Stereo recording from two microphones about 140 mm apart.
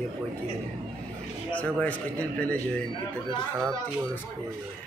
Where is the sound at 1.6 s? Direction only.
10° left (ahead or behind).